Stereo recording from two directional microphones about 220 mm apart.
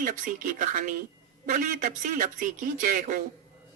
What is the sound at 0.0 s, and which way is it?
Speech, 35° right (ahead or behind).